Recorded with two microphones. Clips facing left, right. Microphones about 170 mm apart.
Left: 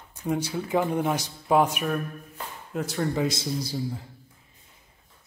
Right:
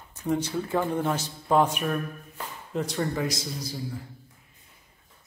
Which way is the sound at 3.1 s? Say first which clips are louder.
Left 3 dB; 25° left (ahead or behind).